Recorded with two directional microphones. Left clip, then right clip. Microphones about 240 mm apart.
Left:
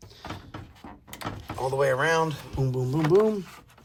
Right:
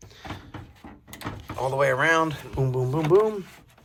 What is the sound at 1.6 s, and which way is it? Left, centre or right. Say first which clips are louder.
Speech: right 2 dB; centre.